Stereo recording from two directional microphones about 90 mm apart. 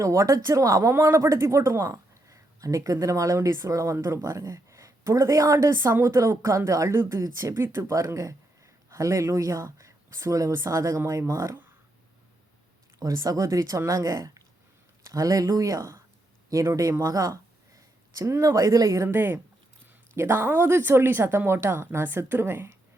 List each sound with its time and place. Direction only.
0.0 s speech: 35° right (ahead or behind)
13.0 s speech: 40° right (ahead or behind)